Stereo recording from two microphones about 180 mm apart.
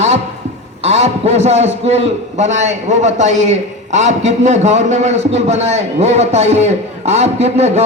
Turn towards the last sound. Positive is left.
turn(degrees=-35)  # may be behind; listen again after turning